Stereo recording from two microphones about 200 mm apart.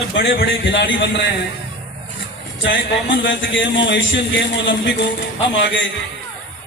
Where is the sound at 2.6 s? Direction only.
65° left (ahead or behind).